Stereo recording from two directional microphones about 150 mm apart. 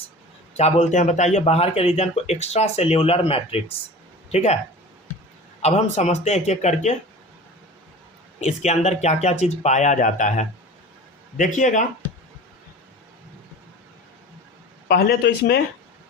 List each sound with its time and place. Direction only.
0.5 s a man's voice: 45° left (ahead or behind)
5.6 s a man's voice: 45° left (ahead or behind)
8.4 s a man's voice: 50° left (ahead or behind)
14.8 s speech: 90° left